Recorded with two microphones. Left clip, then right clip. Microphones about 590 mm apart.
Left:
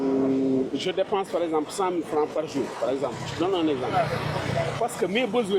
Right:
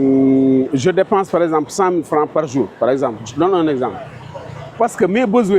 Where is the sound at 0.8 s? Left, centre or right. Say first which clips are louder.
Right 11 dB; right.